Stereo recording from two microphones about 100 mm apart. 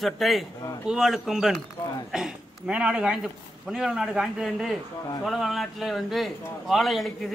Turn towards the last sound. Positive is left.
turn(degrees=0)  # may be behind; listen again after turning